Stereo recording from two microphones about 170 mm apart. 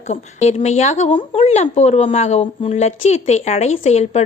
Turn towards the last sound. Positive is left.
turn(degrees=40)  # may be behind; listen again after turning